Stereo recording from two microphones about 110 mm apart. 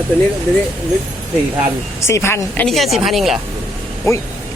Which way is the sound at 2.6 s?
Centre (ahead or behind).